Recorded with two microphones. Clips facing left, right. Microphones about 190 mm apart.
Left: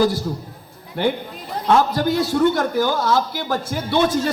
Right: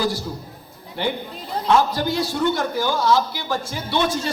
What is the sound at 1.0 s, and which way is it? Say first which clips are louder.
A man's voice: left 4 dB; 45° left (ahead or behind).